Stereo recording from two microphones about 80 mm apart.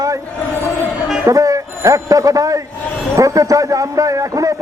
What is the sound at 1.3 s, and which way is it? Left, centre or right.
A man's voice, right.